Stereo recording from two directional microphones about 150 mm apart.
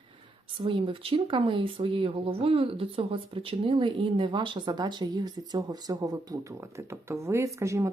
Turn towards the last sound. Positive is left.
turn(degrees=-20)  # may be behind; listen again after turning